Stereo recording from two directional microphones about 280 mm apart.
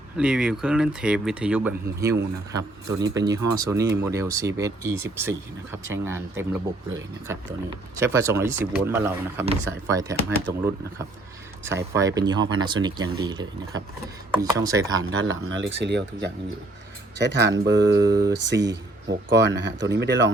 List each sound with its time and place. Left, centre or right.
0.2 s speech: centre
7.9 s speech: centre
11.6 s speech: centre
15.1 s speech: right
17.9 s speech: centre
18.4 s speech: right